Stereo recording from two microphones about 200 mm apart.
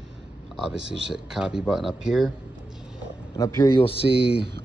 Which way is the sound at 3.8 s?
30° left (ahead or behind).